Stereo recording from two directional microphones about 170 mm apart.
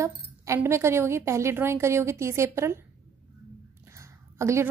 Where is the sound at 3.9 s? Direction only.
15° right (ahead or behind).